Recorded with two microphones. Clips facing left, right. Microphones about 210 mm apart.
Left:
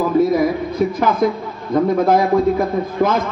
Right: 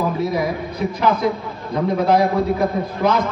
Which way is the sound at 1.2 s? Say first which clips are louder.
Left 3 dB; 50° left (ahead or behind).